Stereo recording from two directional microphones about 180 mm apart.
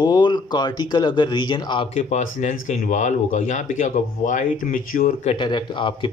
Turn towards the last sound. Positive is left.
turn(degrees=25)  # may be behind; listen again after turning